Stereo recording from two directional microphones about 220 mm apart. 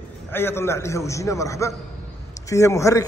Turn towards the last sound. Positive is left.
turn(degrees=15)  # may be behind; listen again after turning